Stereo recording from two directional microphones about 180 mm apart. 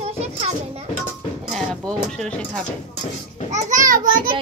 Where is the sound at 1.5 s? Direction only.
5° left (ahead or behind).